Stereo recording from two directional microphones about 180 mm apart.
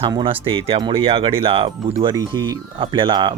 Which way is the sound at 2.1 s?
20° right (ahead or behind).